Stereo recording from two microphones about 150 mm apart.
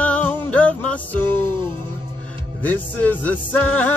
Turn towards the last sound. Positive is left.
turn(degrees=10)  # may be behind; listen again after turning